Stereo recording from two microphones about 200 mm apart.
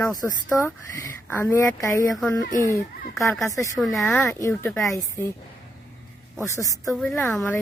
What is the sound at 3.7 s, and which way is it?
Speech, centre (ahead or behind).